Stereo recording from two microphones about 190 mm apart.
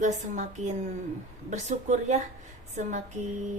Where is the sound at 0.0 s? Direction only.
40° right (ahead or behind).